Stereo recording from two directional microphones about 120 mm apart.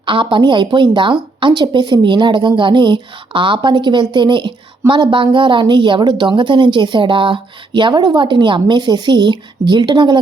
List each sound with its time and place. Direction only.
0.0 s a woman's voice: 45° right (ahead or behind)